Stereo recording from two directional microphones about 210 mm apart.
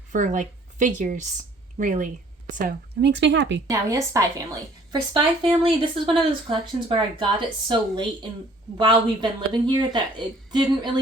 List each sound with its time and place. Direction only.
0.1 s a woman's voice: 35° right (ahead or behind)
3.0 s speech: 55° right (ahead or behind)
3.7 s a woman's voice: 15° right (ahead or behind)